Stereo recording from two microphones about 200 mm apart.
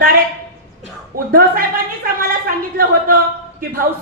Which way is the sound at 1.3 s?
45° right (ahead or behind).